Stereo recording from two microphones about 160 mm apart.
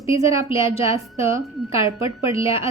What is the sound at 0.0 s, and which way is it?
A woman's voice, 20° right (ahead or behind).